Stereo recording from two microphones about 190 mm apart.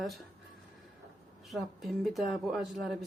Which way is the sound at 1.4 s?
Centre (ahead or behind).